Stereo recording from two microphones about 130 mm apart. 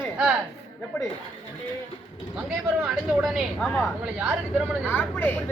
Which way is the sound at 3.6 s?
5° left (ahead or behind).